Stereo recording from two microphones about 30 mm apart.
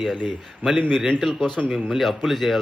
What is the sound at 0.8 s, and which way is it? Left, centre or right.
Speech, left.